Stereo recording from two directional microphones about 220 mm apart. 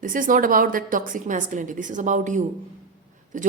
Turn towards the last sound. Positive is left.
turn(degrees=-35)  # may be behind; listen again after turning